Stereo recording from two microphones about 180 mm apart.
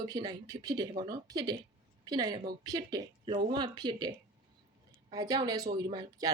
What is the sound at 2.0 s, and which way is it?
Speech, 25° right (ahead or behind).